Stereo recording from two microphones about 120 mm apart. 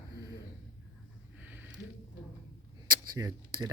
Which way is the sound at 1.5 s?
10° right (ahead or behind).